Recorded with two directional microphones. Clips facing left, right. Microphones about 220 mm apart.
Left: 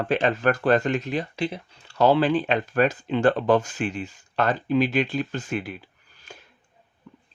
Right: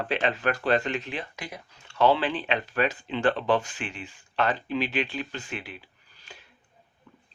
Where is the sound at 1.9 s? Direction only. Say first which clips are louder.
Left 4 dB; 40° left (ahead or behind).